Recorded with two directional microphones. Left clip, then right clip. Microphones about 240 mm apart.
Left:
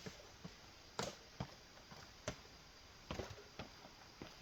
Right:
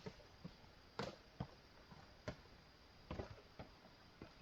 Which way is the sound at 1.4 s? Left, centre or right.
Centre.